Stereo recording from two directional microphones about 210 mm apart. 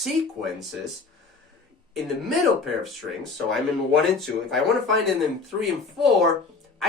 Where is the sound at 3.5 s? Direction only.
Centre (ahead or behind).